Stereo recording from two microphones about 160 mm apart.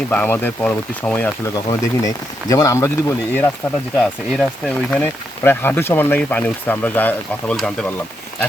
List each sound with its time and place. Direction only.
0.1 s speech: 10° left (ahead or behind)
1.5 s speech: 20° left (ahead or behind)
3.9 s speech: 5° left (ahead or behind)